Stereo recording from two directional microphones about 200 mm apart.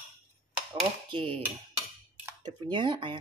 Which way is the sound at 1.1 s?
25° right (ahead or behind).